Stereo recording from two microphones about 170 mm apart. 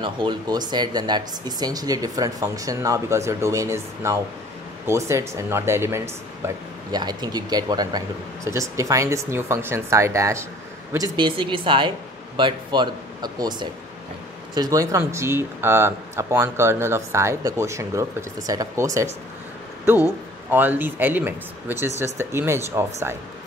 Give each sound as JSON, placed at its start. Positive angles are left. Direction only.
{"t": 0.0, "sound": "speech", "side_deg": -30}
{"t": 11.1, "sound": "speech", "side_deg": -30}